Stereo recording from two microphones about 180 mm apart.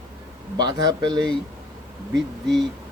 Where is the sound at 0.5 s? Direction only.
25° right (ahead or behind).